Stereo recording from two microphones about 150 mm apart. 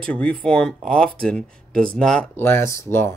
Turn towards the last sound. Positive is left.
turn(degrees=15)  # may be behind; listen again after turning